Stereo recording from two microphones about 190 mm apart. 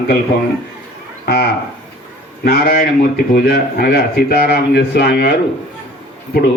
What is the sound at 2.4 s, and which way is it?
Speech, 55° left (ahead or behind).